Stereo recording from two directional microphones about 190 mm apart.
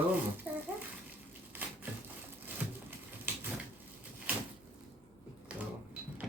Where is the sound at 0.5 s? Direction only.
10° right (ahead or behind).